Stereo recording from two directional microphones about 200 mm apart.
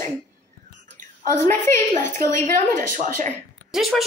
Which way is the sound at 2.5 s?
40° right (ahead or behind).